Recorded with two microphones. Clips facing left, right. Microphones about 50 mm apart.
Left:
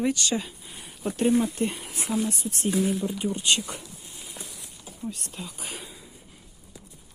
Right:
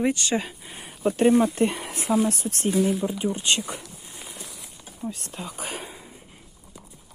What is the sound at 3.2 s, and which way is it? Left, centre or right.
Speech, right.